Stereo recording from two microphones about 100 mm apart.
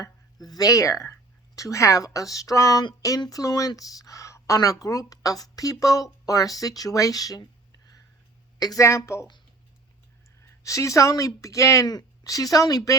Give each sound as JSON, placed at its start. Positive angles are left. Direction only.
{"t": 0.0, "sound": "speech", "side_deg": 40}
{"t": 8.5, "sound": "speech", "side_deg": 35}
{"t": 10.6, "sound": "speech", "side_deg": 30}